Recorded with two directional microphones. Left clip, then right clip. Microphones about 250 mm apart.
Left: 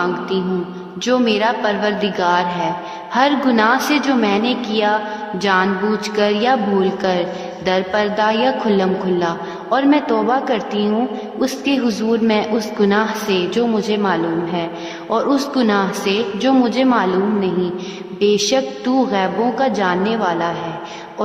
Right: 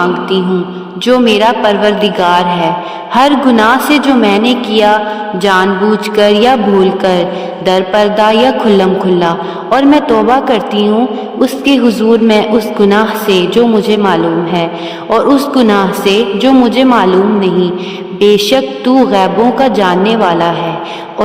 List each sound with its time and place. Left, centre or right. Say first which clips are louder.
0.0 s a man's voice: right 8 dB; right